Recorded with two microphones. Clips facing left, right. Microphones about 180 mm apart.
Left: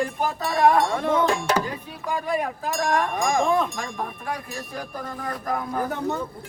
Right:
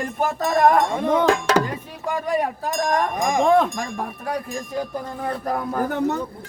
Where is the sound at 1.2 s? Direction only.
90° right.